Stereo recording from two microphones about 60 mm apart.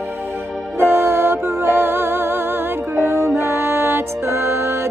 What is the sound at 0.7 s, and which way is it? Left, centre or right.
Music, right.